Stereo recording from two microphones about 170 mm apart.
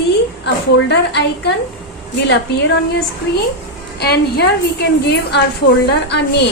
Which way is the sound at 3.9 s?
75° left (ahead or behind).